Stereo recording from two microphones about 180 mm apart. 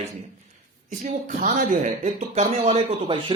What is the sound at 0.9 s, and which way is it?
A man's voice, 45° right (ahead or behind).